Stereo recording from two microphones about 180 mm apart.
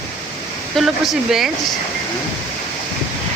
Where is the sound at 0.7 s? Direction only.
Centre (ahead or behind).